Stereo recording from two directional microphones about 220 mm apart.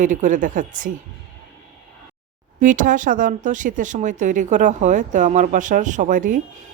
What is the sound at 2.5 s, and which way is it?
Speech, 35° right (ahead or behind).